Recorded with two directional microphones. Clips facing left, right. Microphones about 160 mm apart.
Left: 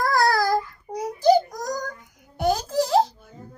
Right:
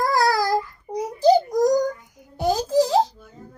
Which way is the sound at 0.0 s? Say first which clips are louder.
Right 1 dB; 15° right (ahead or behind).